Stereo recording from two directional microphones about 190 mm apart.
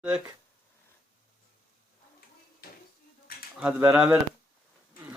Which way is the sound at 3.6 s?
10° right (ahead or behind).